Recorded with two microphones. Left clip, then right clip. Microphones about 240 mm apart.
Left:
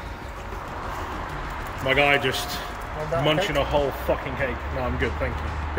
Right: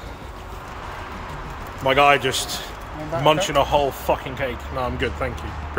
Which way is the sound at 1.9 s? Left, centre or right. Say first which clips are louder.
Right 4 dB; centre.